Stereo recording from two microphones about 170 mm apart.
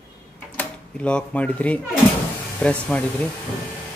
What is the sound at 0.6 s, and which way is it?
Speech, 5° left (ahead or behind).